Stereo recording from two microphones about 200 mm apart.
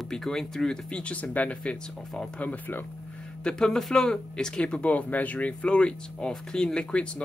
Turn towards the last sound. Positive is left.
turn(degrees=5)  # may be behind; listen again after turning